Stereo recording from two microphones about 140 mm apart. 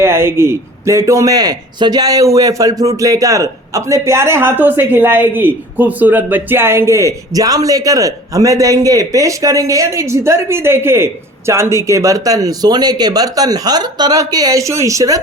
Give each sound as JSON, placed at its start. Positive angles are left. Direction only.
{"t": 0.0, "sound": "speech", "side_deg": -15}